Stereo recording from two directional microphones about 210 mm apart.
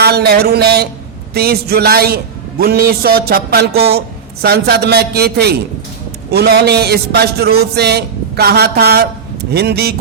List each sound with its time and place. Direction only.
0.0 s a man's voice: 50° right (ahead or behind)